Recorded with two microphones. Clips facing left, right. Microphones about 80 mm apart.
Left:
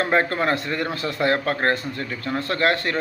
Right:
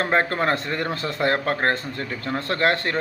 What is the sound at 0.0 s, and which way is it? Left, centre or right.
Speech, right.